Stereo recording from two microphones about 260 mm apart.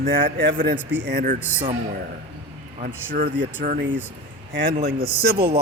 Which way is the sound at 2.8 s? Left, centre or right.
Right.